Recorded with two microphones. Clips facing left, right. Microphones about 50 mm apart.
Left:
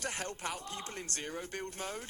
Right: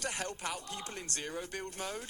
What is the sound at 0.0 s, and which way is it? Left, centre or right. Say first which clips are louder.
Speech: right 1 dB; left.